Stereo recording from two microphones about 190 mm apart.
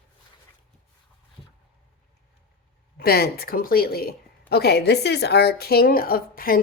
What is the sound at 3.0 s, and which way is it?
A woman's voice, 55° left (ahead or behind).